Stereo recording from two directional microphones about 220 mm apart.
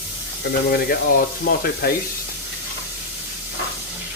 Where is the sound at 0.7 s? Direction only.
40° left (ahead or behind).